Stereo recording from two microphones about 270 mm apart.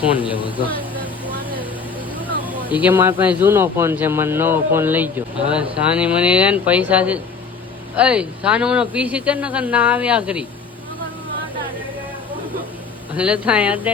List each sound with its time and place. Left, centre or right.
2.7 s speech: centre
13.1 s speech: centre